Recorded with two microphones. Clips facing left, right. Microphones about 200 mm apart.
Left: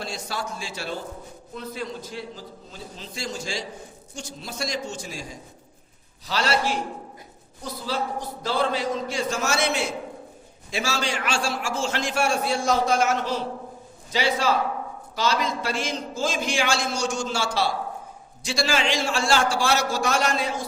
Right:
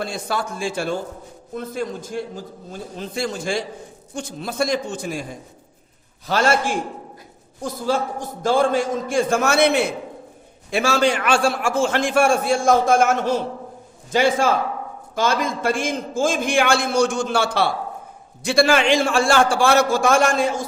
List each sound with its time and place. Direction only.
0.0 s a man's voice: 55° right (ahead or behind)